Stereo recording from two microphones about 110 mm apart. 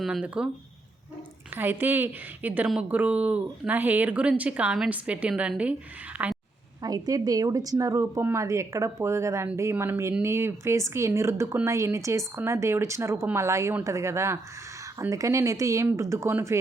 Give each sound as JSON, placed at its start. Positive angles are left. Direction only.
{"t": 0.0, "sound": "a woman's voice", "side_deg": -5}
{"t": 1.5, "sound": "a woman's voice", "side_deg": -20}
{"t": 6.8, "sound": "speech", "side_deg": -35}